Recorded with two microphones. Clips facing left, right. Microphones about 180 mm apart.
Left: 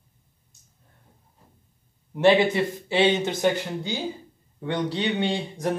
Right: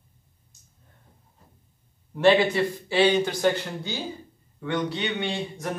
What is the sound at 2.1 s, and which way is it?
A man's voice, 20° left (ahead or behind).